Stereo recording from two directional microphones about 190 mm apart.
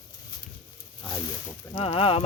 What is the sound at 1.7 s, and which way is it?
Speech, 30° left (ahead or behind).